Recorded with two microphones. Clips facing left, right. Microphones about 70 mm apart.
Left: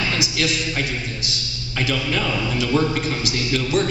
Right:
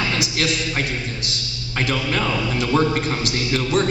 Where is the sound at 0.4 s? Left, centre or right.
Right.